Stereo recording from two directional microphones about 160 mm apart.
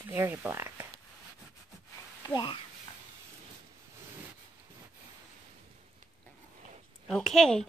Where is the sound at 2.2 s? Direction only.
25° left (ahead or behind).